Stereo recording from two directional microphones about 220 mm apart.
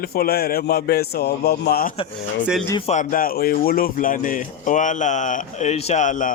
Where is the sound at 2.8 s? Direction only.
35° left (ahead or behind).